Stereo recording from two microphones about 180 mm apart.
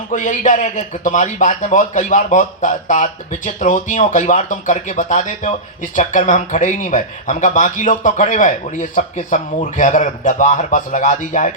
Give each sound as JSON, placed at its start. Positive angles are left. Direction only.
{"t": 0.1, "sound": "a man's voice", "side_deg": 45}